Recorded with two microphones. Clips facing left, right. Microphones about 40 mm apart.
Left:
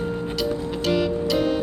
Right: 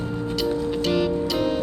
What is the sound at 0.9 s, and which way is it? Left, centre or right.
Music, centre.